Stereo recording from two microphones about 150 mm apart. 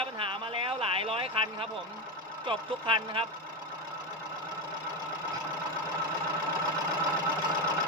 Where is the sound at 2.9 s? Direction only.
35° right (ahead or behind).